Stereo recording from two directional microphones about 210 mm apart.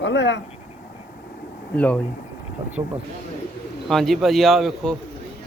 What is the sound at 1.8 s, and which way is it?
Speech, 5° left (ahead or behind).